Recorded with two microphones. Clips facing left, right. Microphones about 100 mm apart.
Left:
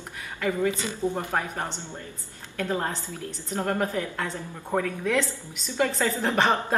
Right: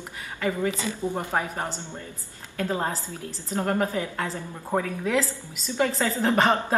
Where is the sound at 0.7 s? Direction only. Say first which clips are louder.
Even; 20° left (ahead or behind).